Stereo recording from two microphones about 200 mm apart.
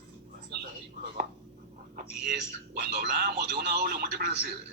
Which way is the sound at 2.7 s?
55° right (ahead or behind).